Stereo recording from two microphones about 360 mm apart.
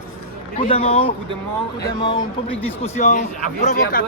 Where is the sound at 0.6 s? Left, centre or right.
Centre.